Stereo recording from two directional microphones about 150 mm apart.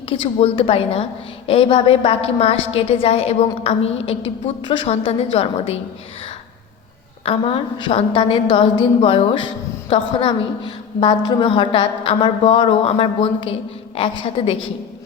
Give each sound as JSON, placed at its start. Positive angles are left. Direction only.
{"t": 0.1, "sound": "a woman's voice", "side_deg": 35}
{"t": 7.3, "sound": "a woman's voice", "side_deg": 35}